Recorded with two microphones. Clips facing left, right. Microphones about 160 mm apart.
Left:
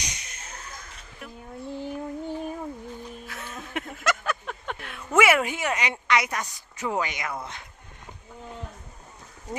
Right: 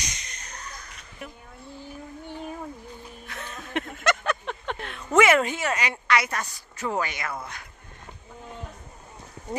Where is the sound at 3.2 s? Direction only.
5° left (ahead or behind).